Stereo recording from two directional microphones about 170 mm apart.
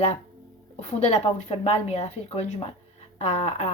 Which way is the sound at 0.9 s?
40° left (ahead or behind).